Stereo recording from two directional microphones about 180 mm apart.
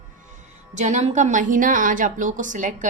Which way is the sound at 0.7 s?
40° right (ahead or behind).